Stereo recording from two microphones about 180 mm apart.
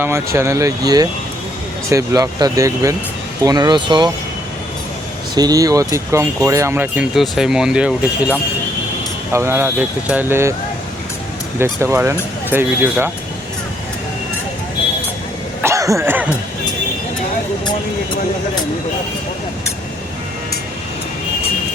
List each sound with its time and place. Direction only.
0.0 s speech: 15° right (ahead or behind)
1.9 s speech: 20° right (ahead or behind)
5.3 s speech: 20° right (ahead or behind)
9.3 s speech: 15° right (ahead or behind)
11.6 s speech: 15° right (ahead or behind)
15.6 s cough: 15° right (ahead or behind)